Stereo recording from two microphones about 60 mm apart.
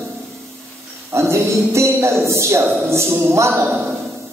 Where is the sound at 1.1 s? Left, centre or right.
Right.